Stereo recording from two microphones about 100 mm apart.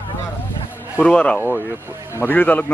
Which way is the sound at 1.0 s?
10° left (ahead or behind).